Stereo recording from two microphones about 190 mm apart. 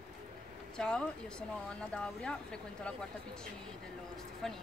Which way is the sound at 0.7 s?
5° left (ahead or behind).